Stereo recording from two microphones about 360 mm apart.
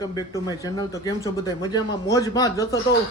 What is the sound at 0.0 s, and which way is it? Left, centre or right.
A man's voice, centre.